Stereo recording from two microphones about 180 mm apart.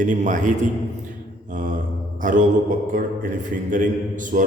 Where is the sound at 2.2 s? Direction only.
45° right (ahead or behind).